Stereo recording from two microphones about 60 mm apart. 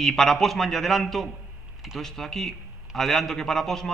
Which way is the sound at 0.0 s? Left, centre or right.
Centre.